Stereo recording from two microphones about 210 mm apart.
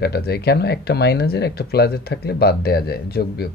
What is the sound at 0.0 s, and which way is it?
Speech, 50° left (ahead or behind).